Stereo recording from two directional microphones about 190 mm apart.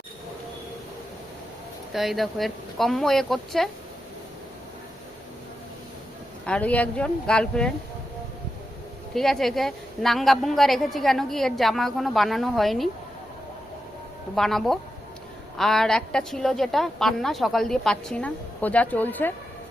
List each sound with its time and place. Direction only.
1.9 s a woman's voice: centre (ahead or behind)
6.4 s a woman's voice: 5° left (ahead or behind)
9.1 s a woman's voice: centre (ahead or behind)
14.3 s a woman's voice: centre (ahead or behind)